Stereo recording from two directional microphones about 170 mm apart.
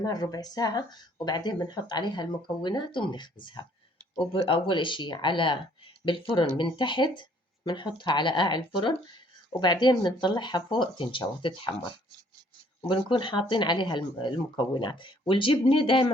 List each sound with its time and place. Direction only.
0.0 s speech: 25° left (ahead or behind)
12.9 s speech: 30° left (ahead or behind)